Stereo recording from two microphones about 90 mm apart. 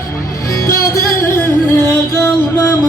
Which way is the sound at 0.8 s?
35° left (ahead or behind).